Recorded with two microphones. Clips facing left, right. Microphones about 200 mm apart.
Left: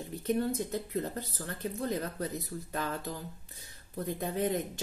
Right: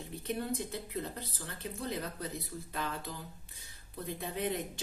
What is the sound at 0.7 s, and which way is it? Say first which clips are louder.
Speech: left 5 dB; 45° left (ahead or behind).